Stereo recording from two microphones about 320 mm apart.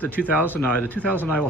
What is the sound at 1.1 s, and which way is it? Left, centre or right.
Speech, centre.